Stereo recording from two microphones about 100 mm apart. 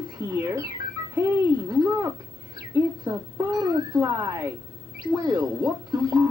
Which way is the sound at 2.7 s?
25° right (ahead or behind).